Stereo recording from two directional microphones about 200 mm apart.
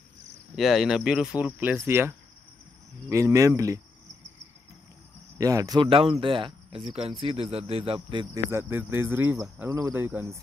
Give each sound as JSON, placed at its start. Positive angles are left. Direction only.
{"t": 0.6, "sound": "speech", "side_deg": 0}
{"t": 5.4, "sound": "speech", "side_deg": -15}
{"t": 8.5, "sound": "speech", "side_deg": -10}